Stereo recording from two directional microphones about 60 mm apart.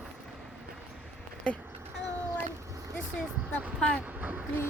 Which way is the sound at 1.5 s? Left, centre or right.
Centre.